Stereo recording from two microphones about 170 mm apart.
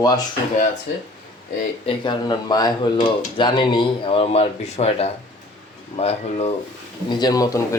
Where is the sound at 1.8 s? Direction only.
30° left (ahead or behind).